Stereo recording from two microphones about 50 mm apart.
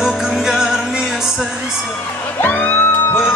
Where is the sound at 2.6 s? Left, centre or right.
Left.